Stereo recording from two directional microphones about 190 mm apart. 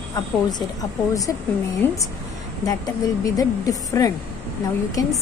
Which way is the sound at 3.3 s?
20° left (ahead or behind).